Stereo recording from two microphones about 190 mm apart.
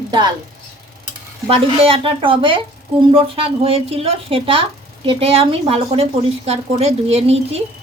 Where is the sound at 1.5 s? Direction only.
30° right (ahead or behind).